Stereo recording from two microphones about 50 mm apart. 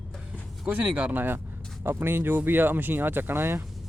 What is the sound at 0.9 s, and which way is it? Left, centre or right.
Speech, right.